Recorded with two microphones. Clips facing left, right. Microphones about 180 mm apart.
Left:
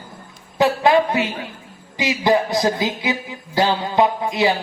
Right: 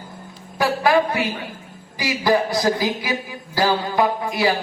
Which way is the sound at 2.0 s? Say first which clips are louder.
Left 1 dB; 20° left (ahead or behind).